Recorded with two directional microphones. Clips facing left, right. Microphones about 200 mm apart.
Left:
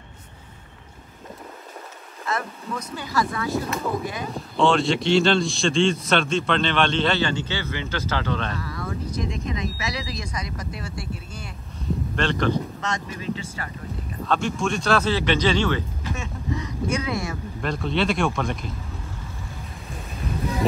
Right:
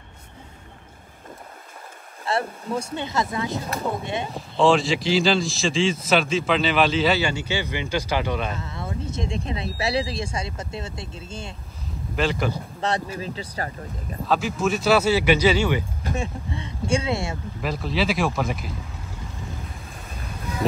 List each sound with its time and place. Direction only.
2.2 s speech: 30° right (ahead or behind)
4.6 s speech: centre (ahead or behind)
8.5 s speech: 25° right (ahead or behind)
12.2 s speech: 5° right (ahead or behind)
12.8 s speech: 35° right (ahead or behind)
14.2 s speech: 5° right (ahead or behind)
16.2 s speech: 30° right (ahead or behind)
17.6 s speech: 5° right (ahead or behind)